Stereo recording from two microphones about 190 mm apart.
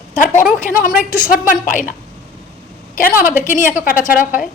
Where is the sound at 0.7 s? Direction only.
50° left (ahead or behind).